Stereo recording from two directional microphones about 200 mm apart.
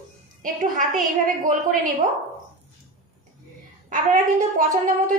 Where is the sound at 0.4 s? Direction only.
40° right (ahead or behind).